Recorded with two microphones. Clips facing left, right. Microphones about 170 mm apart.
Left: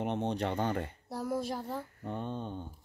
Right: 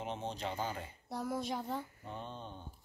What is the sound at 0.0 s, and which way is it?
Speech, 65° left (ahead or behind).